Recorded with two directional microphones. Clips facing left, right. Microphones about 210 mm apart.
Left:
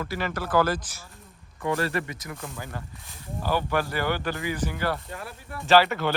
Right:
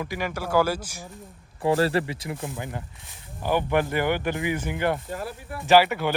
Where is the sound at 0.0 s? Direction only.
10° right (ahead or behind).